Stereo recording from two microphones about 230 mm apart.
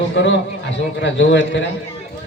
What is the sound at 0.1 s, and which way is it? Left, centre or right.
A man's voice, left.